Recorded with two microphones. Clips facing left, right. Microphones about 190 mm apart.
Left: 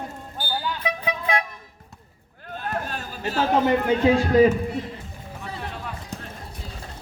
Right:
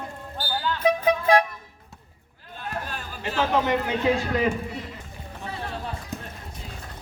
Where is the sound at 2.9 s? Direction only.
40° left (ahead or behind).